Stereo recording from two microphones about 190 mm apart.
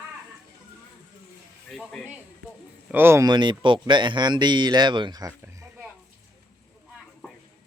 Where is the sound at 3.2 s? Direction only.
25° right (ahead or behind).